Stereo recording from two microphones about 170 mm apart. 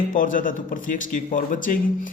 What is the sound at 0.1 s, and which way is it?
A man's voice, 50° left (ahead or behind).